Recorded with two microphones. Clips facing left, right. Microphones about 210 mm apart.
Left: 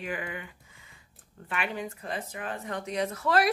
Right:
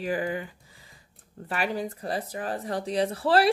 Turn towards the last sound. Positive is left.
turn(degrees=-30)  # may be behind; listen again after turning